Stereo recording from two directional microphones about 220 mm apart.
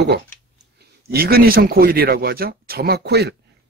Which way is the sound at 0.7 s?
45° right (ahead or behind).